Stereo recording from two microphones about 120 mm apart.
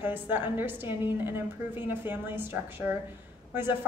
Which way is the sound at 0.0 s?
15° right (ahead or behind).